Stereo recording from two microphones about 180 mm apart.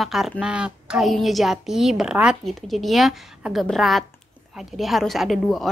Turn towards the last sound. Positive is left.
turn(degrees=0)  # may be behind; listen again after turning